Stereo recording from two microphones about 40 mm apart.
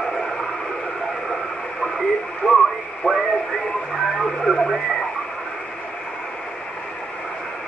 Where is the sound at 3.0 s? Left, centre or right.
Left.